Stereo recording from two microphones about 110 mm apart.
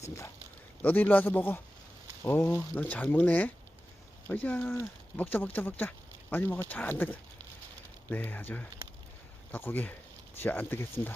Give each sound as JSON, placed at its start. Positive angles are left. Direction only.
{"t": 0.8, "sound": "speech", "side_deg": 15}